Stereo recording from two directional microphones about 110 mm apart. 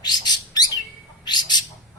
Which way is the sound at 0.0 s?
40° left (ahead or behind).